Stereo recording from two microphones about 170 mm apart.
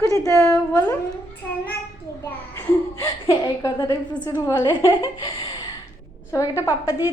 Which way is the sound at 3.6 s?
25° left (ahead or behind).